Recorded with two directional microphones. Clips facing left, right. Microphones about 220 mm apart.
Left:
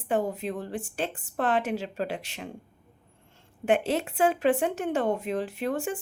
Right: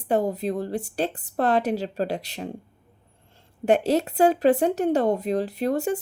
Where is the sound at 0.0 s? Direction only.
40° right (ahead or behind).